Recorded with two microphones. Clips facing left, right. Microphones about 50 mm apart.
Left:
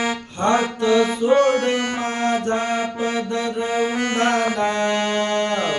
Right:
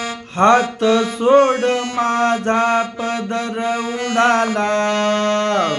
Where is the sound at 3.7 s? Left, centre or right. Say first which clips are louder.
Even; right.